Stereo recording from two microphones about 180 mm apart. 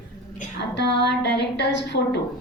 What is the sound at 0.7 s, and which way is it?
A woman's voice, 75° left (ahead or behind).